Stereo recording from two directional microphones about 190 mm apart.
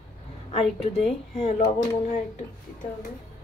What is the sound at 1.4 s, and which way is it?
Speech, 35° left (ahead or behind).